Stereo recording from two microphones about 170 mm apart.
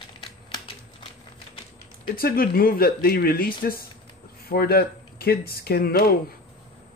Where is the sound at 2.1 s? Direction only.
60° left (ahead or behind).